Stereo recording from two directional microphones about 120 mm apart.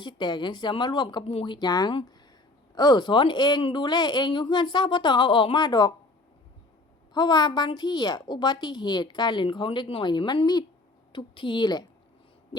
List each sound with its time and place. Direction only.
0.0 s a woman's voice: 40° left (ahead or behind)
1.2 s a woman's voice: 50° left (ahead or behind); by 5.9 s 35° left (ahead or behind)
7.1 s a woman's voice: 35° left (ahead or behind)